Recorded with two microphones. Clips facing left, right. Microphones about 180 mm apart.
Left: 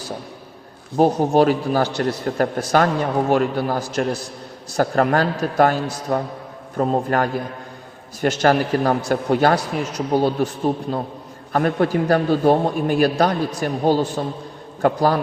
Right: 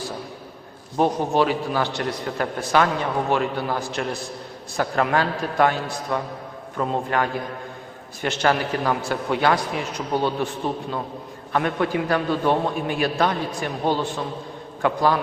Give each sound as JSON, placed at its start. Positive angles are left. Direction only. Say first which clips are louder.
{"t": 0.9, "sound": "a man's voice", "louder": "left 5 dB", "side_deg": 35}
{"t": 11.5, "sound": "a man's voice", "louder": "left 4 dB", "side_deg": 40}